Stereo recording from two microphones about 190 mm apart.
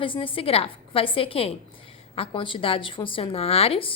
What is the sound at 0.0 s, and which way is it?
A woman's voice, 25° left (ahead or behind).